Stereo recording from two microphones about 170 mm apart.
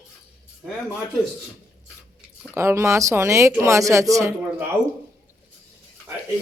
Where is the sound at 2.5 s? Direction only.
15° right (ahead or behind).